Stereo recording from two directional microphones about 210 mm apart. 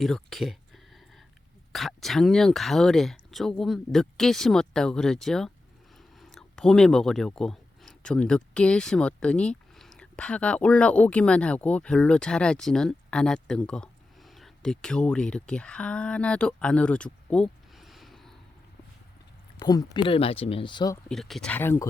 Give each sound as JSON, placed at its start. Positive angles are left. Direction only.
{"t": 0.0, "sound": "speech", "side_deg": 0}
{"t": 1.7, "sound": "speech", "side_deg": 0}
{"t": 19.5, "sound": "speech", "side_deg": 20}
{"t": 21.1, "sound": "speech", "side_deg": 0}